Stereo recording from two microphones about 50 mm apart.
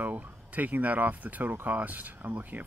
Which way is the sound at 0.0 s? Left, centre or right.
Right.